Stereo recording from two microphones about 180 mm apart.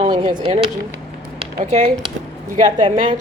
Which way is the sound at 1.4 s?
40° right (ahead or behind).